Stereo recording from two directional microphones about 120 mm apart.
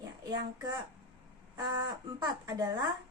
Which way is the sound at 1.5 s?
35° right (ahead or behind).